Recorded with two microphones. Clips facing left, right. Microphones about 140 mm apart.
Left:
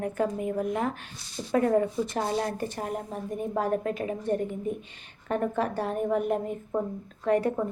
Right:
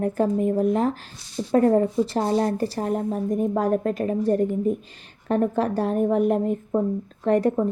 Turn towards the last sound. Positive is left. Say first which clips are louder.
# right 5 dB
turn(degrees=-40)  # may be behind; listen again after turning